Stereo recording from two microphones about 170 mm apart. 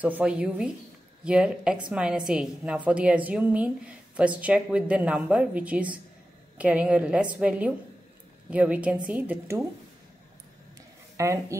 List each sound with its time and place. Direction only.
0.0 s a woman's voice: 5° right (ahead or behind)
11.1 s a woman's voice: 15° right (ahead or behind)